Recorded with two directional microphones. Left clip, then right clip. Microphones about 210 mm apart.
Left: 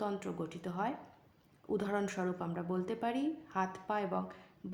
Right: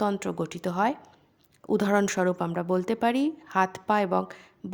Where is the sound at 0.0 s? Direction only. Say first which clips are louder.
Right 10 dB; 45° right (ahead or behind).